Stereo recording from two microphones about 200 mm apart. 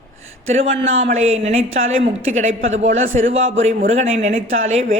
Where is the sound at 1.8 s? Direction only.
75° right (ahead or behind).